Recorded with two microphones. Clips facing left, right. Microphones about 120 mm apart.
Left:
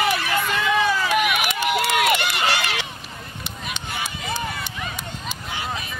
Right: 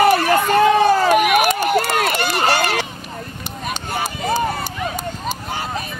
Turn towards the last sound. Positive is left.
turn(degrees=-40)  # may be behind; listen again after turning